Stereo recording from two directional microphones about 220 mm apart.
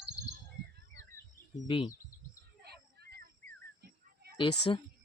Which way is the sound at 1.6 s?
20° left (ahead or behind).